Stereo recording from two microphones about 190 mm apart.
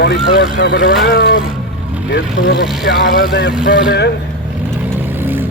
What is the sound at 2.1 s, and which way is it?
Speech, 75° left (ahead or behind).